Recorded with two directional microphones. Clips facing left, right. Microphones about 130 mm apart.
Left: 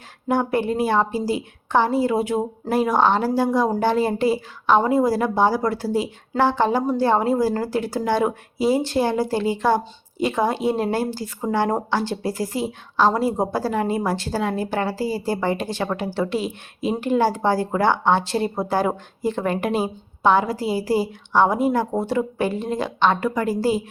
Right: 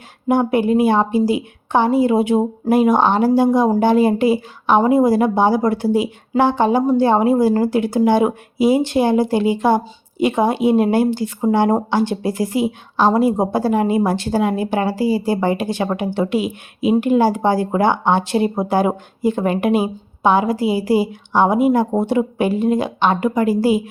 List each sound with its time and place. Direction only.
0.3 s speech: 15° right (ahead or behind)